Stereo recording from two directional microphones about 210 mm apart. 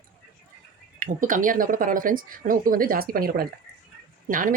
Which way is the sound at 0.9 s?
40° right (ahead or behind).